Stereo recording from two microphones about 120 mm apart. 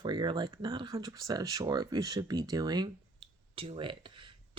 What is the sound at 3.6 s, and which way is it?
Speech, 45° right (ahead or behind).